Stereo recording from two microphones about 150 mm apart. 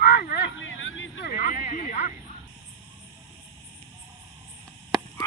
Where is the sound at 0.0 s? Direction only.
90° left.